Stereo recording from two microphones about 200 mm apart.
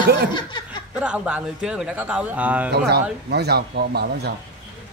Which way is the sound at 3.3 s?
55° right (ahead or behind).